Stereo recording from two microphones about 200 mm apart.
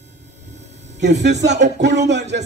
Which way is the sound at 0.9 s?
60° right (ahead or behind).